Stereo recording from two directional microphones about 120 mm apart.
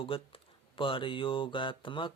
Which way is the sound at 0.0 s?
45° left (ahead or behind).